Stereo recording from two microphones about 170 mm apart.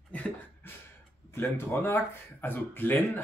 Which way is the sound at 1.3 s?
15° left (ahead or behind).